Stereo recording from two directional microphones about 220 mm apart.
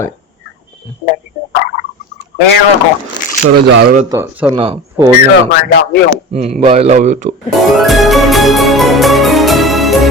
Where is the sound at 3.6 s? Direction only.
50° right (ahead or behind).